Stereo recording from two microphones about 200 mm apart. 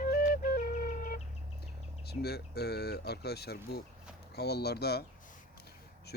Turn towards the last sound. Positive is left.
turn(degrees=55)  # may be behind; listen again after turning